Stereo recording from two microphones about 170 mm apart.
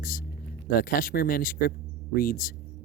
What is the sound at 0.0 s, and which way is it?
Speech, 55° left (ahead or behind).